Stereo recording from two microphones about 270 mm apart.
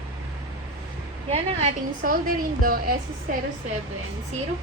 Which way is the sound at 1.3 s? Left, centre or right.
Right.